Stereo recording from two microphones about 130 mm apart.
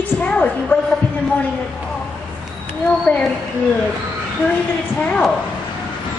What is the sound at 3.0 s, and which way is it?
Speech, 10° left (ahead or behind).